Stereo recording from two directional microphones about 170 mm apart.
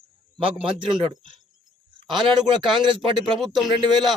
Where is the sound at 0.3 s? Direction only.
30° right (ahead or behind).